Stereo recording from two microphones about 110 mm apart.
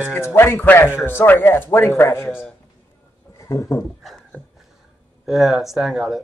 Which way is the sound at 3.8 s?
Centre (ahead or behind).